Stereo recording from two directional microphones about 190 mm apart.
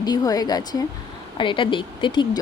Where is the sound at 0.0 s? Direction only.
20° left (ahead or behind).